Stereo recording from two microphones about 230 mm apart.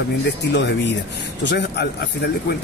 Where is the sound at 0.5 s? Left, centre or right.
Left.